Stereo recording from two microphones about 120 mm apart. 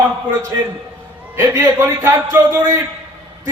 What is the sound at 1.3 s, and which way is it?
A man's voice, 20° right (ahead or behind).